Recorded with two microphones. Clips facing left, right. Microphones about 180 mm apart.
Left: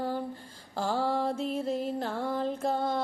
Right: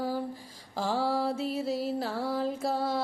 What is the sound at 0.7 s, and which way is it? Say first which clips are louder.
Music: even; 5° right (ahead or behind).